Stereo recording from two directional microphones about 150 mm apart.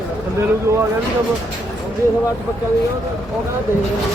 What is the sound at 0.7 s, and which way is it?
Speech, 20° right (ahead or behind).